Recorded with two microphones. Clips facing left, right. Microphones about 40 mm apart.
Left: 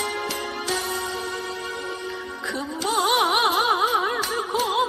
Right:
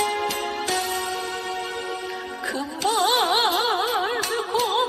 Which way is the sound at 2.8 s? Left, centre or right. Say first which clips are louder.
Even; right.